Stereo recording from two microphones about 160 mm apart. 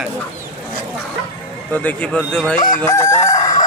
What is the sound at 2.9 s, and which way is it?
Chicken, 20° left (ahead or behind).